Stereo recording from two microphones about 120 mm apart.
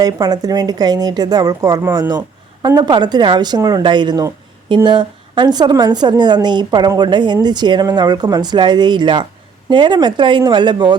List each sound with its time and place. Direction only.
0.0 s a woman's voice: 35° right (ahead or behind)